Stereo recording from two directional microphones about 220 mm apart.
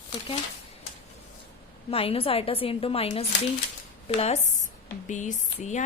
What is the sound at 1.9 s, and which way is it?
A woman's voice, 25° left (ahead or behind).